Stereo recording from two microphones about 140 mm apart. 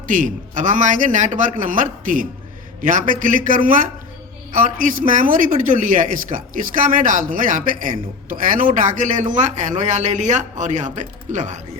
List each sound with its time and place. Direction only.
0.1 s a man's voice: 65° right (ahead or behind)